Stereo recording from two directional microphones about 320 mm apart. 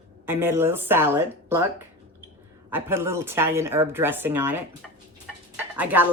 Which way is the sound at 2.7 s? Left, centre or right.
Centre.